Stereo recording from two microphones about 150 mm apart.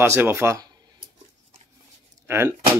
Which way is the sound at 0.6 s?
30° right (ahead or behind).